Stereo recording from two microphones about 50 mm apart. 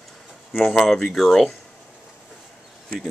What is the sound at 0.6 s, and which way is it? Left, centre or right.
Speech, centre.